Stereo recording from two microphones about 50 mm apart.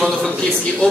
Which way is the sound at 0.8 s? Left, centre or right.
Left.